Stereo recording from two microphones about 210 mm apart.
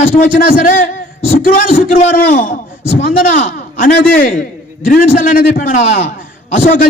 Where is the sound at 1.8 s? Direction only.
40° left (ahead or behind).